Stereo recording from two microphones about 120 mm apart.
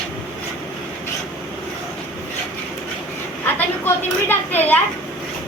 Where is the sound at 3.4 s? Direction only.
15° left (ahead or behind).